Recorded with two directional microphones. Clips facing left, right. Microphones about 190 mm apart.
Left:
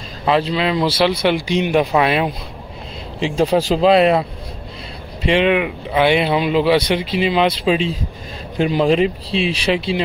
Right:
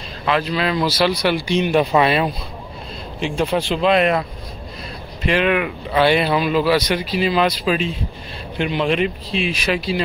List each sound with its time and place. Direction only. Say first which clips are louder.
0.2 s a man's voice: left 3 dB; 25° left (ahead or behind)
3.3 s speech: left 5 dB; 35° left (ahead or behind)
5.3 s a man's voice: left 3 dB; 25° left (ahead or behind)
8.5 s speech: left 4 dB; 35° left (ahead or behind)